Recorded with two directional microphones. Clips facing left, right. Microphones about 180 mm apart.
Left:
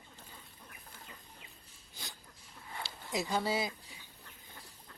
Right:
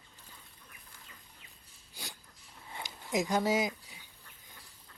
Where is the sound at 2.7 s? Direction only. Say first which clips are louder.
Right 4 dB; 15° right (ahead or behind).